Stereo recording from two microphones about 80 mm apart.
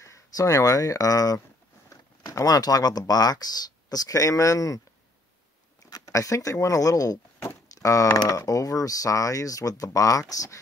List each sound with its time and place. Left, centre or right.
0.0 s speech: left
5.9 s speech: left